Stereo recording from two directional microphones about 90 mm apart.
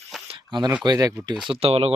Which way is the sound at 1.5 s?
90° right.